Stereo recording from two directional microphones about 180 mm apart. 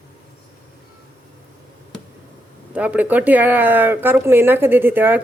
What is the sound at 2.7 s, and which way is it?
Speech, 10° right (ahead or behind).